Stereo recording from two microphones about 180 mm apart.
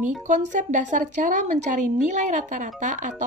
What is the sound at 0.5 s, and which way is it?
A woman's voice, 45° right (ahead or behind).